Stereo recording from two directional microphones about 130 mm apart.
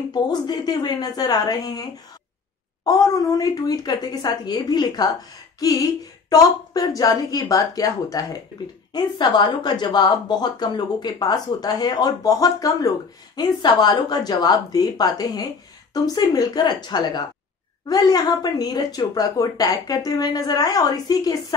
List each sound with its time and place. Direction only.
0.1 s a woman's voice: 35° left (ahead or behind)